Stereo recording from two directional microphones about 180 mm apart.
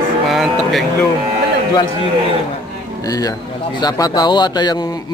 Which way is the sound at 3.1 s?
20° left (ahead or behind).